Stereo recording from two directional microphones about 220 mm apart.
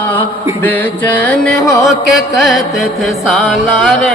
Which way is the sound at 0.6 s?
10° left (ahead or behind).